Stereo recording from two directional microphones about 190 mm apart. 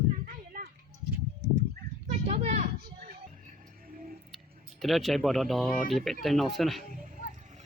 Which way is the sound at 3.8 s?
50° right (ahead or behind).